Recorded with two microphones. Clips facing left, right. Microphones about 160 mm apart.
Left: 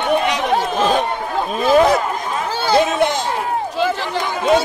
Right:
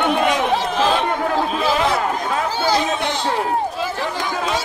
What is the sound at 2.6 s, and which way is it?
Chatter, 60° left (ahead or behind).